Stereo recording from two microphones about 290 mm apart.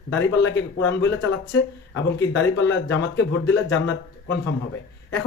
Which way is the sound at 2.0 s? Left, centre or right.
Left.